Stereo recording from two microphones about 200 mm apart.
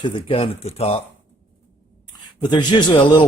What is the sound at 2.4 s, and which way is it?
Speech, 20° left (ahead or behind).